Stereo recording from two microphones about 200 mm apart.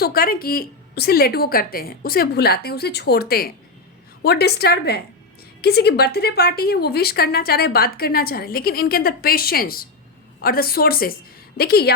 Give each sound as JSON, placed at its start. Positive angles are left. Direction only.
{"t": 0.0, "sound": "a woman's voice", "side_deg": 50}